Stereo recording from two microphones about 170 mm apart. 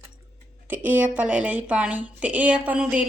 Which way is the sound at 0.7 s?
10° right (ahead or behind).